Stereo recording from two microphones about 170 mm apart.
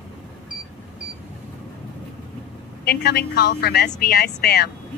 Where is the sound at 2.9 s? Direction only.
65° left (ahead or behind).